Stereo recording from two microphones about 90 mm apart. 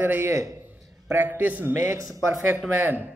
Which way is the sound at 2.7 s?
20° right (ahead or behind).